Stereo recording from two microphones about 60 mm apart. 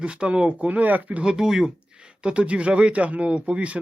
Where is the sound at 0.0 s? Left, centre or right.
Centre.